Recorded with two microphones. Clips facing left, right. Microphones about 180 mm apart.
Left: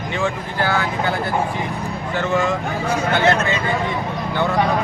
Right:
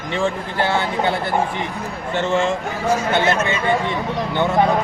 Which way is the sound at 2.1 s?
25° right (ahead or behind).